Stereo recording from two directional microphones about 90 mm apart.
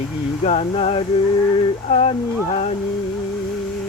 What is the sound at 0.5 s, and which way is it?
Music, 90° left.